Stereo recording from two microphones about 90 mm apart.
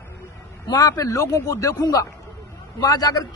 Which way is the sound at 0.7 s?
50° left (ahead or behind).